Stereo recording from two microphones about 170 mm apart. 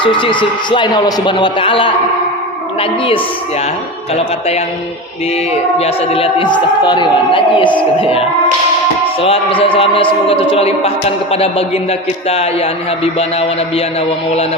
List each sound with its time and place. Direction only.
0.0 s a man's voice: 30° left (ahead or behind)
5.8 s a man's voice: 35° left (ahead or behind)
9.2 s a man's voice: 35° left (ahead or behind)